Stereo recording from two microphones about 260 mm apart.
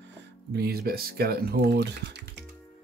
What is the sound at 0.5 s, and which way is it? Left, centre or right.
Speech, right.